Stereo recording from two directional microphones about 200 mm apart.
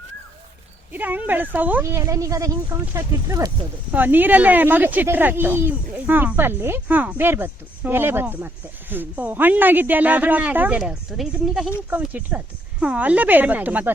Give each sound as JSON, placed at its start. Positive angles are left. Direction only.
{"t": 0.9, "sound": "speech", "side_deg": -10}